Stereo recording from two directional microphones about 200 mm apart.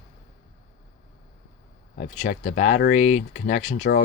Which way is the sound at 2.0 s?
40° left (ahead or behind).